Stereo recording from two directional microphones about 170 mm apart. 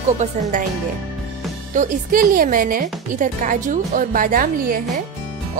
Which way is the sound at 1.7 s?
50° right (ahead or behind).